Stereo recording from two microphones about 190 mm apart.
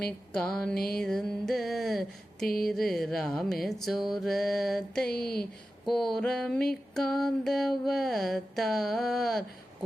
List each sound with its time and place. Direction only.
0.3 s mantra: 5° left (ahead or behind)